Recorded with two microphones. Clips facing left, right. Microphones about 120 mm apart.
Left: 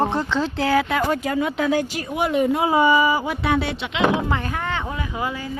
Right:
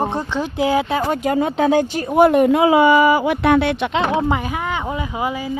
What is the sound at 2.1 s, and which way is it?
Speech, 55° right (ahead or behind).